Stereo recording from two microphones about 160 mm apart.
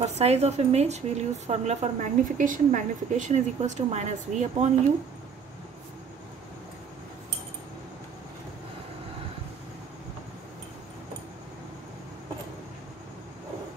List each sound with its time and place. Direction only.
0.0 s a woman's voice: 40° right (ahead or behind)